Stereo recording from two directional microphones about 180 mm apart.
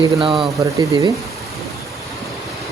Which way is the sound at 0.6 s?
15° right (ahead or behind).